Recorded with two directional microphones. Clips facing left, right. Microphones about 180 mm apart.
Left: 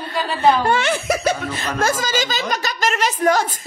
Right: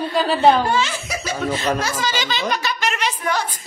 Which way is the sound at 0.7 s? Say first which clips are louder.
Left 3 dB; 60° left (ahead or behind).